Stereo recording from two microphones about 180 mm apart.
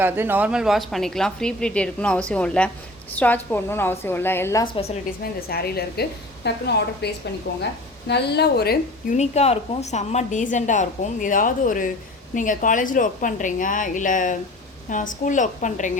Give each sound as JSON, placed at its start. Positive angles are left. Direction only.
{"t": 0.0, "sound": "a woman's voice", "side_deg": -10}
{"t": 5.5, "sound": "a woman's voice", "side_deg": 60}
{"t": 9.1, "sound": "a woman's voice", "side_deg": 35}